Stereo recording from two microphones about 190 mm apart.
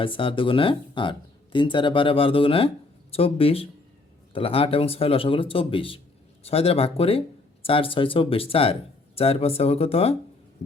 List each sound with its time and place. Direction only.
0.0 s speech: 25° left (ahead or behind)